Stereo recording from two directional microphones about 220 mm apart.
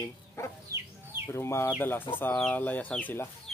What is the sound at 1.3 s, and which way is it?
Speech, 10° left (ahead or behind).